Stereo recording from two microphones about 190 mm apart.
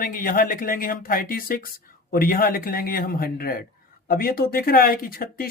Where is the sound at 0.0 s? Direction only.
50° left (ahead or behind).